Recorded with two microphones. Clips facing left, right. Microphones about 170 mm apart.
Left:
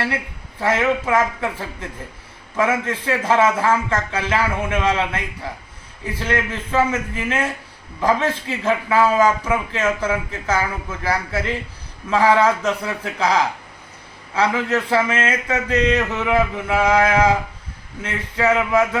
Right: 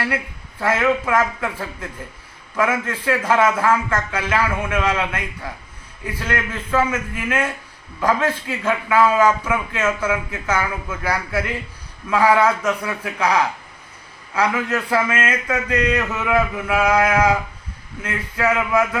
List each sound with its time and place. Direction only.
0.6 s speech: 30° left (ahead or behind)